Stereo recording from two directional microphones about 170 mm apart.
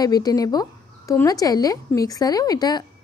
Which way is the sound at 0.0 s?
20° left (ahead or behind).